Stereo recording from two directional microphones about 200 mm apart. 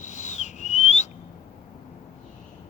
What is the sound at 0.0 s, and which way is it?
Whistling, 35° left (ahead or behind).